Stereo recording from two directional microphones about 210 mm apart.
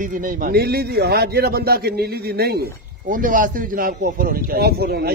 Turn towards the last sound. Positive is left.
turn(degrees=-50)  # may be behind; listen again after turning